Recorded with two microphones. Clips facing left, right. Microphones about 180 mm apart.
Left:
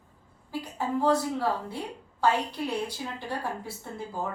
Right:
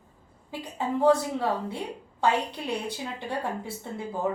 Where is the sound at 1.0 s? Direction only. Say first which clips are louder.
Right 3 dB; 20° right (ahead or behind).